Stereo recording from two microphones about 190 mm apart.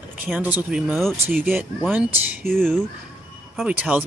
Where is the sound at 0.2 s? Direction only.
10° right (ahead or behind).